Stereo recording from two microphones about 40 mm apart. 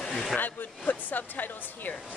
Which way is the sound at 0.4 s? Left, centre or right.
Left.